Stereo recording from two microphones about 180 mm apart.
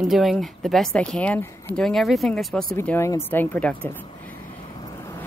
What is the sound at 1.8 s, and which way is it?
Speech, centre (ahead or behind).